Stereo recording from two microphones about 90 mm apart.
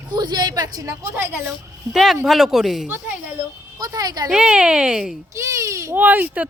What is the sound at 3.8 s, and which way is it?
Speech, 45° right (ahead or behind).